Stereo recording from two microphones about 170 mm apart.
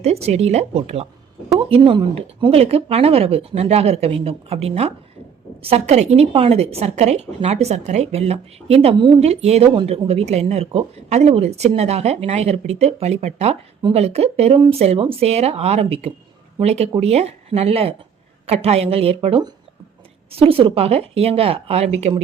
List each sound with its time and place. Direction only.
0.0 s a woman's voice: 40° right (ahead or behind)